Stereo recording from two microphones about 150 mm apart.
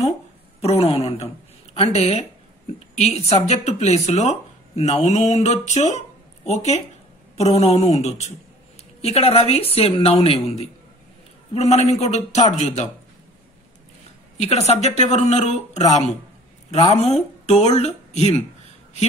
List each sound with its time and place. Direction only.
0.6 s a woman's voice: 40° left (ahead or behind)
14.3 s speech: 45° left (ahead or behind)
16.9 s speech: 45° left (ahead or behind)